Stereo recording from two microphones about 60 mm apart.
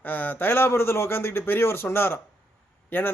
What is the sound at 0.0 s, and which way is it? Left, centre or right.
A man's voice, left.